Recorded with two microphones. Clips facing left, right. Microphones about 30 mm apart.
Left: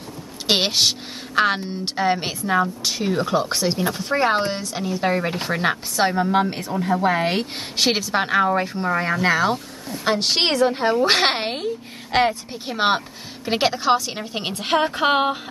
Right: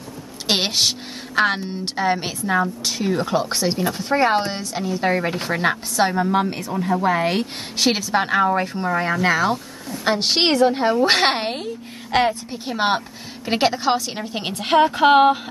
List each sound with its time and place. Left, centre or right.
0.5 s a woman's voice: centre
10.0 s a woman's voice: centre